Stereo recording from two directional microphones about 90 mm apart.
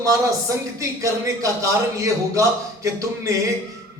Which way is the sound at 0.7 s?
35° right (ahead or behind).